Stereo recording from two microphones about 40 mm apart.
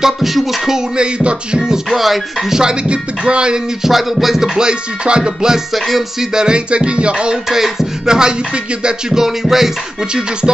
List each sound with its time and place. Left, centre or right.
0.0 s music: centre
0.7 s music: right
1.9 s music: centre
2.6 s music: right
3.8 s music: centre
4.6 s music: right
5.7 s music: centre
6.3 s music: right
7.4 s rapping: centre
8.8 s music: centre